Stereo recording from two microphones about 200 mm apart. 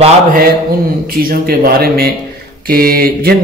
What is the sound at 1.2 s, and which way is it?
Speech, 50° right (ahead or behind).